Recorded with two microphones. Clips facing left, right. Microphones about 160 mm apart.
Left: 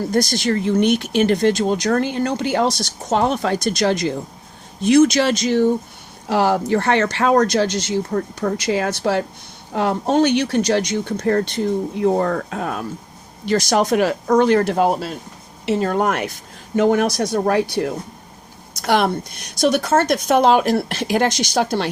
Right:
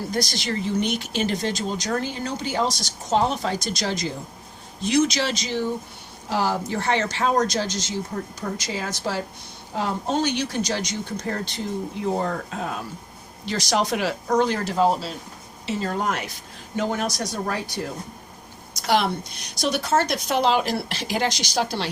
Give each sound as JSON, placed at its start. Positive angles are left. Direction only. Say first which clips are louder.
{"t": 0.1, "sound": "a woman's voice", "louder": "left 9 dB", "side_deg": 50}
{"t": 6.2, "sound": "speech", "louder": "left 7 dB", "side_deg": 65}
{"t": 18.8, "sound": "a woman's voice", "louder": "left 4 dB", "side_deg": 55}